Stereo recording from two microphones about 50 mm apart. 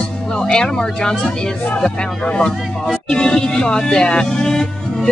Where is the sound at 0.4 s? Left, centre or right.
Centre.